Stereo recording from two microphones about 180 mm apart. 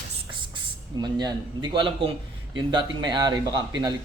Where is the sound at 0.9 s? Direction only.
25° right (ahead or behind).